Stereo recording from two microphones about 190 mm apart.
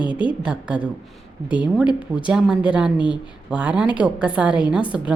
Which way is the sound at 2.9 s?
25° left (ahead or behind).